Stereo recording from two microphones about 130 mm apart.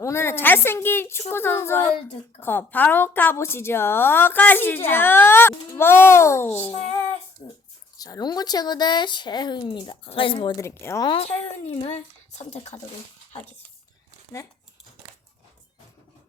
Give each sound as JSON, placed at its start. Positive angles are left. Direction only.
{"t": 0.0, "sound": "a woman's voice", "side_deg": 20}
{"t": 6.7, "sound": "a woman's voice", "side_deg": 55}
{"t": 7.9, "sound": "speech", "side_deg": 30}
{"t": 10.6, "sound": "speech", "side_deg": 20}
{"t": 11.2, "sound": "a woman's voice", "side_deg": 55}
{"t": 14.3, "sound": "speech", "side_deg": 25}